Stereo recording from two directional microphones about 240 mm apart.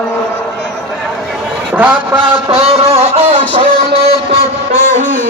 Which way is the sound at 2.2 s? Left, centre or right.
Right.